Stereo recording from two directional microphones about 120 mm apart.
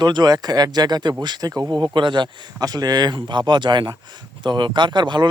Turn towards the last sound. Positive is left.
turn(degrees=-40)  # may be behind; listen again after turning